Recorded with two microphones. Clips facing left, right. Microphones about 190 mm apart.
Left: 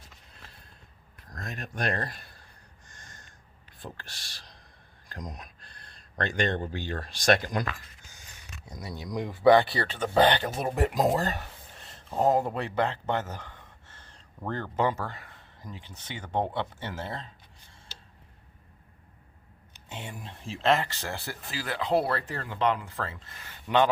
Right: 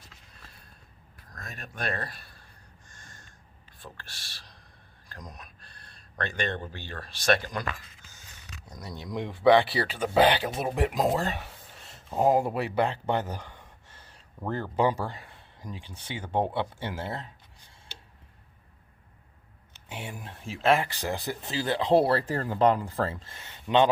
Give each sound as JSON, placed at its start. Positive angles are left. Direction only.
{"t": 1.7, "sound": "speech", "side_deg": 45}
{"t": 4.0, "sound": "a sound", "side_deg": 15}
{"t": 6.1, "sound": "speech", "side_deg": 40}
{"t": 7.1, "sound": "speech", "side_deg": 15}
{"t": 8.6, "sound": "speech", "side_deg": 10}
{"t": 19.9, "sound": "speech", "side_deg": -10}